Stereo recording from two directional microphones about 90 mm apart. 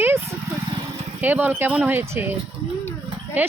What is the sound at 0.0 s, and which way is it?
Vehicle, 25° right (ahead or behind).